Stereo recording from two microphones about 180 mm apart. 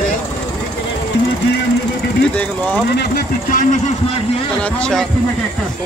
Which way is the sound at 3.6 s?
45° left (ahead or behind).